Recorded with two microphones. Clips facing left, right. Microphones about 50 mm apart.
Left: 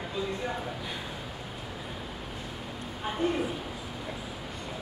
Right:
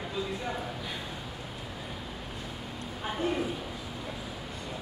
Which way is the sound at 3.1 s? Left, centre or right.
Centre.